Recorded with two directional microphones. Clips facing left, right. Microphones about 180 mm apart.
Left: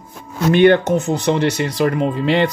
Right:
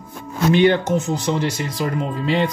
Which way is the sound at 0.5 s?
60° left (ahead or behind).